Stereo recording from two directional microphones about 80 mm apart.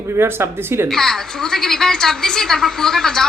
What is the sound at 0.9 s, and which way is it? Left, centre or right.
A woman's voice, centre.